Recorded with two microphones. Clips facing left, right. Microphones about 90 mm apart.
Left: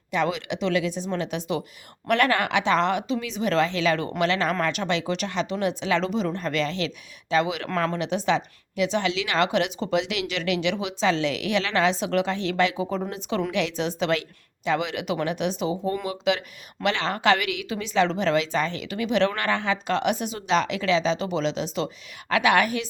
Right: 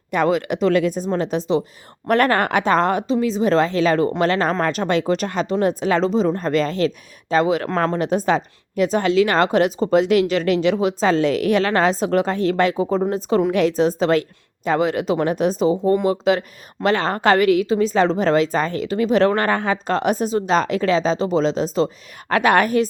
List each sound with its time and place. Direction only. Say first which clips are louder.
0.1 s a woman's voice: right 7 dB; 45° right (ahead or behind)